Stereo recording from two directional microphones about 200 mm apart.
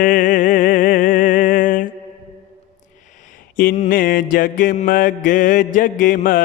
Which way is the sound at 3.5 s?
45° left (ahead or behind).